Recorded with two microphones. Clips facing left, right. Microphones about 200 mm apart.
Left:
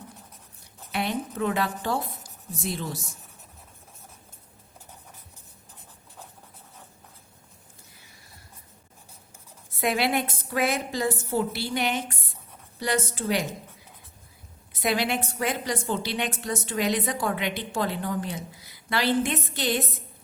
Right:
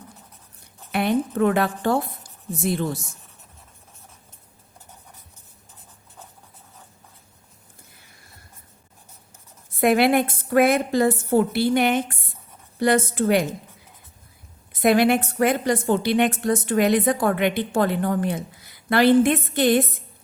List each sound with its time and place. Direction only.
0.9 s a woman's voice: 55° right (ahead or behind)
9.8 s a woman's voice: 55° right (ahead or behind)
14.7 s a woman's voice: 55° right (ahead or behind)